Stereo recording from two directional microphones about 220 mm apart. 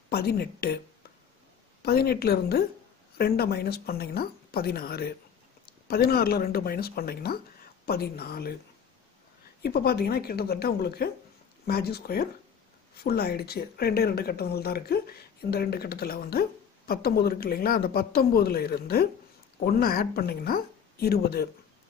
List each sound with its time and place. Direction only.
0.1 s speech: 45° left (ahead or behind)
1.8 s speech: 45° left (ahead or behind)
9.6 s speech: 45° left (ahead or behind)